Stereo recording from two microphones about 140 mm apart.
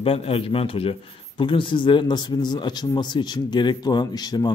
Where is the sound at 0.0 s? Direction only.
45° left (ahead or behind).